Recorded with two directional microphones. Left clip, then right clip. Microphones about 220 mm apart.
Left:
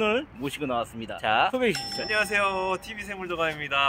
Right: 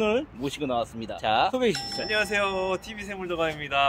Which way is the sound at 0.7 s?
5° left (ahead or behind).